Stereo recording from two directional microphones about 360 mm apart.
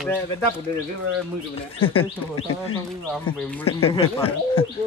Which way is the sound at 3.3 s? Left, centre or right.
Centre.